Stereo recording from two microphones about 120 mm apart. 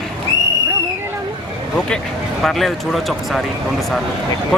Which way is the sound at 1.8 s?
5° left (ahead or behind).